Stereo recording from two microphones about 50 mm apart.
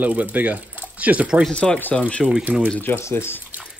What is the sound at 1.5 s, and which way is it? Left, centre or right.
Speech, centre.